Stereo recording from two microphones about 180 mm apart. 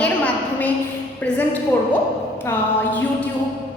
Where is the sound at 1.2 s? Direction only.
10° left (ahead or behind).